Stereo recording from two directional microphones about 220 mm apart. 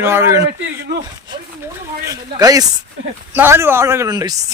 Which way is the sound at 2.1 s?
15° right (ahead or behind).